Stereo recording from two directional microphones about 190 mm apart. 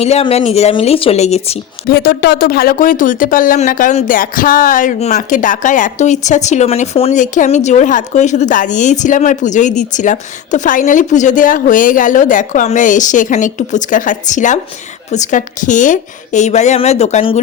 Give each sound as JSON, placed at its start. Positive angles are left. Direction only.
{"t": 0.0, "sound": "speech", "side_deg": 35}
{"t": 1.9, "sound": "speech", "side_deg": 55}